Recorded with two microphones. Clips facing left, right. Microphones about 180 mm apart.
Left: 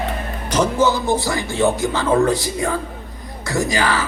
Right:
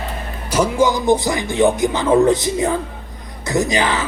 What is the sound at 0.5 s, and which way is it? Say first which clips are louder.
Speech: right 1 dB; 10° right (ahead or behind).